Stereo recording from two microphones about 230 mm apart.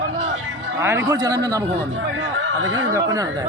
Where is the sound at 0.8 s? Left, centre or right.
Centre.